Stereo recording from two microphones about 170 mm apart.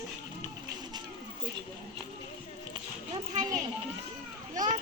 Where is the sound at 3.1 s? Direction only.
25° right (ahead or behind).